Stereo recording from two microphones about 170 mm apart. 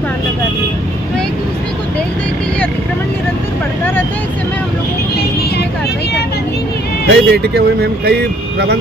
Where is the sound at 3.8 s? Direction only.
10° left (ahead or behind).